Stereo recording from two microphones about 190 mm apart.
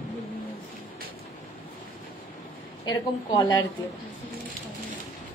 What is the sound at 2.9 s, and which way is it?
Speech, 20° left (ahead or behind).